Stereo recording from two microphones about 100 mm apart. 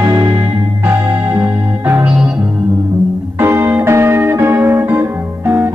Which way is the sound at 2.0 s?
10° right (ahead or behind).